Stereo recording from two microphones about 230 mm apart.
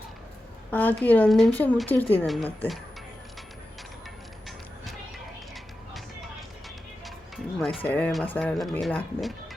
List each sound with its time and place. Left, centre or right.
0.7 s a woman's voice: centre
7.8 s a woman's voice: centre